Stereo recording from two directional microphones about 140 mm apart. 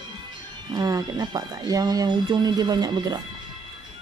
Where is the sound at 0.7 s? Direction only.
25° right (ahead or behind).